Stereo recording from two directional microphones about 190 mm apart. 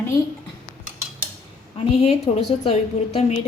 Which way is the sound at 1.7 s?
35° left (ahead or behind).